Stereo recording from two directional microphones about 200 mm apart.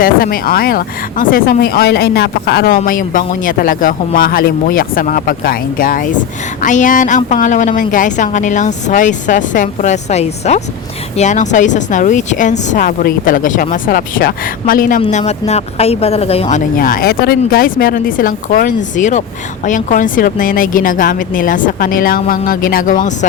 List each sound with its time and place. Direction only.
0.0 s speech: 45° left (ahead or behind)
2.8 s speech: 45° left (ahead or behind)
15.0 s speech: 30° left (ahead or behind)